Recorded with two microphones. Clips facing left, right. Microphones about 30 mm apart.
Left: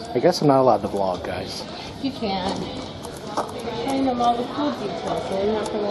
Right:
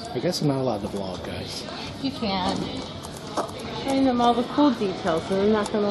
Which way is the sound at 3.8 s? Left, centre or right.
Centre.